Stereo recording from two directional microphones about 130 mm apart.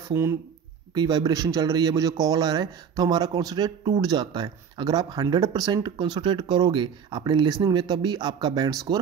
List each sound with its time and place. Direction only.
0.1 s speech: 20° right (ahead or behind)
0.9 s speech: 30° right (ahead or behind)